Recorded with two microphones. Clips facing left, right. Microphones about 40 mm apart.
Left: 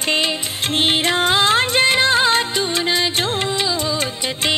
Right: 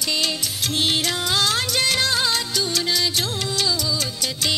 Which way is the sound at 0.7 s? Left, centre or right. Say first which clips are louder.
Left 6 dB; left.